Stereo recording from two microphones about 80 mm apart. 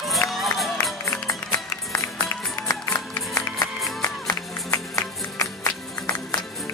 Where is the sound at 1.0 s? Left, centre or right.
Left.